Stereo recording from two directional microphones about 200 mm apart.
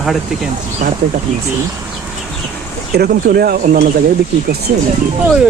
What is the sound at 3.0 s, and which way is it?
Speech, 50° right (ahead or behind).